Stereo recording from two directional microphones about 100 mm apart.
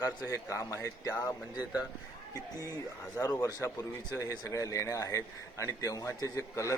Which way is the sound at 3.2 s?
40° left (ahead or behind).